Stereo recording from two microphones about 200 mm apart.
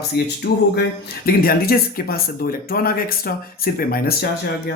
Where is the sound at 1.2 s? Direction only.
50° left (ahead or behind).